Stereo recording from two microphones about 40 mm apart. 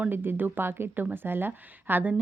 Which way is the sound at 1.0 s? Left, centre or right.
Right.